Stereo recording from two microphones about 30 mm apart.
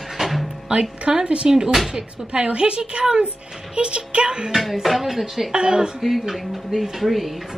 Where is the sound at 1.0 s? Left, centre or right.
Right.